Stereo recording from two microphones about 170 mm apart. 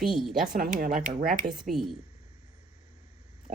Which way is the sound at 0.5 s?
55° right (ahead or behind).